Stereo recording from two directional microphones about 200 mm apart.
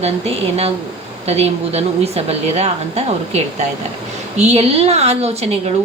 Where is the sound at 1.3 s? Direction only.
30° right (ahead or behind).